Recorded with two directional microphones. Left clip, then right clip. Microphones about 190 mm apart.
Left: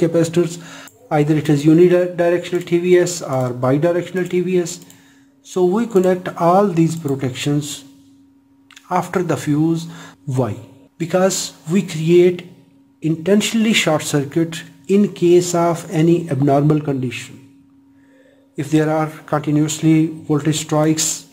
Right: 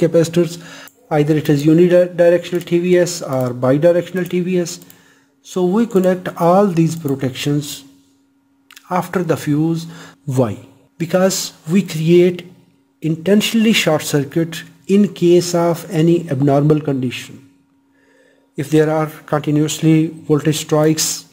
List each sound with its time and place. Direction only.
0.0 s speech: 20° right (ahead or behind)
18.6 s speech: 25° right (ahead or behind)